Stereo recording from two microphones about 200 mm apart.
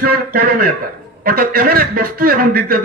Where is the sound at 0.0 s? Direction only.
45° right (ahead or behind).